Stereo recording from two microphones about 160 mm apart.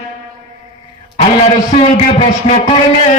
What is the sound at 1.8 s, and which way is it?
Speech, 40° left (ahead or behind).